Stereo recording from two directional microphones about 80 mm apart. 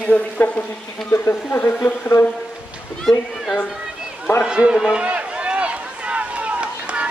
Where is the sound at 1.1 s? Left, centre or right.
Left.